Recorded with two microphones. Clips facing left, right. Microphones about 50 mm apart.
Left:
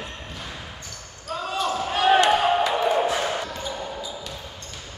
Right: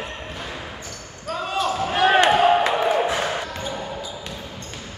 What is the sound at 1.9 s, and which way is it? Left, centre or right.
Basketball bounce, right.